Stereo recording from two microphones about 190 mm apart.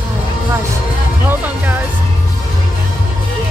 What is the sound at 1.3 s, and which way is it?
Music, 10° right (ahead or behind).